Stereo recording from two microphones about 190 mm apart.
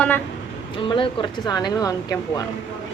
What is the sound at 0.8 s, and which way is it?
Speech, 25° left (ahead or behind).